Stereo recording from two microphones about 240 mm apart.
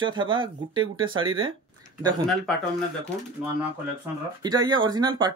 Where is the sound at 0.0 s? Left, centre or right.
Centre.